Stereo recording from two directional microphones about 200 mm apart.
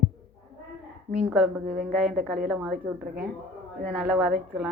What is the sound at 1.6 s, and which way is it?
Speech, 45° right (ahead or behind).